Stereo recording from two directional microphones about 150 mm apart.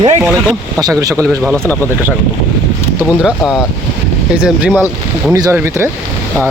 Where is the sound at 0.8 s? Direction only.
25° right (ahead or behind).